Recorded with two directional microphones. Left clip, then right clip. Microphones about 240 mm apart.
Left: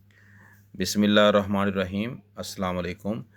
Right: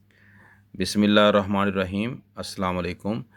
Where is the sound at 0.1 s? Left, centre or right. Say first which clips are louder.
Right 1 dB; centre.